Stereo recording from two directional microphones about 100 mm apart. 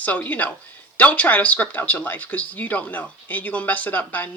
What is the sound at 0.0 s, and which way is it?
Speech, 15° left (ahead or behind).